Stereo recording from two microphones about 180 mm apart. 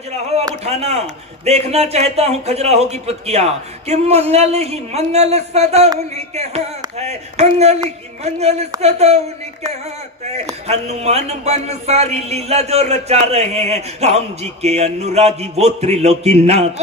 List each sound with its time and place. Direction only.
0.6 s a man's voice: 35° right (ahead or behind)
10.7 s a man's voice: 35° right (ahead or behind)